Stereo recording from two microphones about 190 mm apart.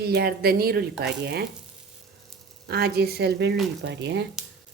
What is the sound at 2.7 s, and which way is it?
Speech, 55° right (ahead or behind).